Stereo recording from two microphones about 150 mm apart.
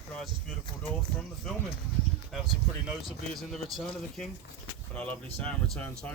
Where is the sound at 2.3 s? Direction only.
Centre (ahead or behind).